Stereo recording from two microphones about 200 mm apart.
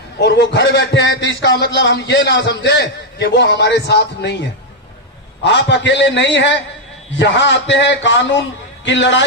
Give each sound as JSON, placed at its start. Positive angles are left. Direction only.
{"t": 0.2, "sound": "a man's voice", "side_deg": 60}
{"t": 5.5, "sound": "a man's voice", "side_deg": 60}